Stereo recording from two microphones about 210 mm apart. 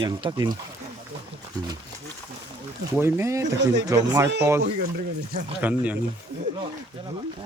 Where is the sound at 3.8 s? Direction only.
15° right (ahead or behind).